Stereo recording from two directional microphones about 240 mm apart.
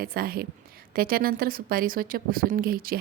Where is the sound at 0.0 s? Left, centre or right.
Right.